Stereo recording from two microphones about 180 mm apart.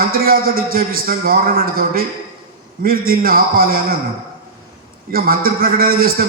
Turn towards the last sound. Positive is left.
turn(degrees=-55)  # may be behind; listen again after turning